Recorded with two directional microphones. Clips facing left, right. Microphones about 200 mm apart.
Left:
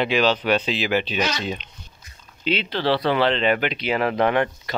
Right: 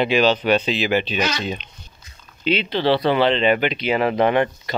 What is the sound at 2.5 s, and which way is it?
Speech, centre (ahead or behind).